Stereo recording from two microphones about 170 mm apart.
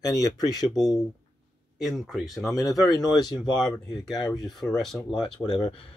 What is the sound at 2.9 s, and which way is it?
Speech, 25° left (ahead or behind).